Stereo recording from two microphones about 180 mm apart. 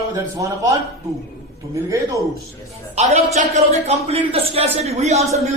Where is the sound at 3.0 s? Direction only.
35° right (ahead or behind).